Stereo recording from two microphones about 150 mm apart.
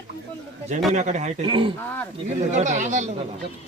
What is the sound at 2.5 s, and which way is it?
Speech, 55° right (ahead or behind).